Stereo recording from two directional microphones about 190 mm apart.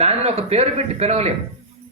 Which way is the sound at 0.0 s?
35° right (ahead or behind).